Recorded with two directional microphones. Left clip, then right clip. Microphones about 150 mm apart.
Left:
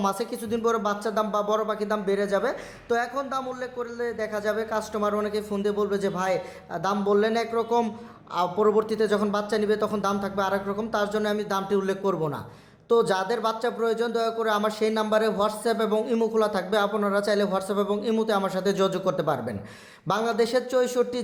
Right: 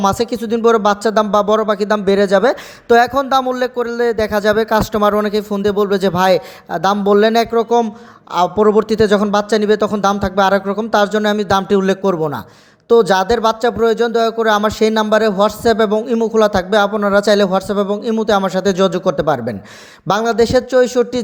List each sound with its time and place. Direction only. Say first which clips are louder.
0.0 s speech: right 11 dB; 50° right (ahead or behind)
16.0 s a man's voice: right 10 dB; 35° right (ahead or behind)